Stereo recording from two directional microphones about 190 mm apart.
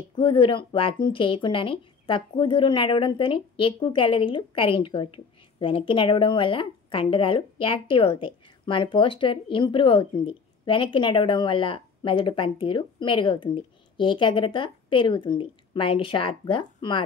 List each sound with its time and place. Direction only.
0.2 s speech: 30° left (ahead or behind)